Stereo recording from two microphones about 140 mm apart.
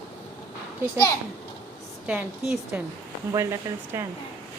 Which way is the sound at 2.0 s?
10° right (ahead or behind).